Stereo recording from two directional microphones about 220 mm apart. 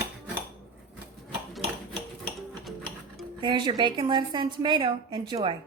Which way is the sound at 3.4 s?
20° right (ahead or behind).